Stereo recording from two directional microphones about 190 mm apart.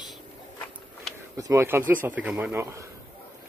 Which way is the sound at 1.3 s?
15° right (ahead or behind).